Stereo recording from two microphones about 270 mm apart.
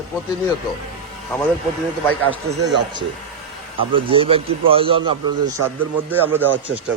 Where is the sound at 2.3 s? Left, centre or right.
Centre.